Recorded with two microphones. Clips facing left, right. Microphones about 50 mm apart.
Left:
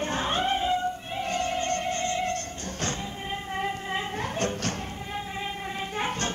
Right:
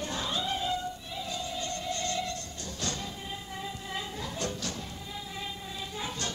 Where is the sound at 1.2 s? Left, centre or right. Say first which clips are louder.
Left 9 dB; left.